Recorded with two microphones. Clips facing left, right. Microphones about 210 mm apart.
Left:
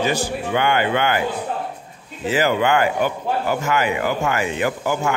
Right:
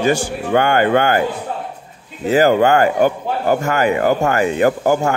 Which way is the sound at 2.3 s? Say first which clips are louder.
Right 6 dB; 45° right (ahead or behind).